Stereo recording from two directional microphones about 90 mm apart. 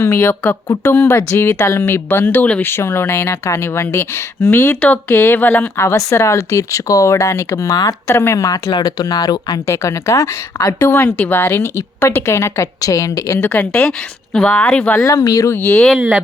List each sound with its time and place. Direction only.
0.1 s speech: 20° left (ahead or behind); by 7.9 s 45° left (ahead or behind)
8.0 s speech: 25° left (ahead or behind)
8.4 s speech: 40° left (ahead or behind)
10.7 s speech: 25° left (ahead or behind)
14.3 s speech: 15° left (ahead or behind)
14.9 s speech: 35° left (ahead or behind)
15.5 s speech: 25° left (ahead or behind)
16.0 s speech: 15° right (ahead or behind)